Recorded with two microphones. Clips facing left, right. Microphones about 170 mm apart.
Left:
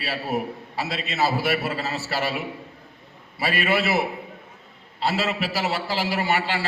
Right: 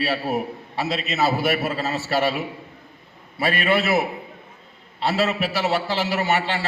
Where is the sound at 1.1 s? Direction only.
20° right (ahead or behind).